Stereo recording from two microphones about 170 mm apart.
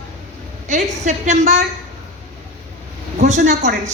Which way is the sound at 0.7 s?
45° right (ahead or behind).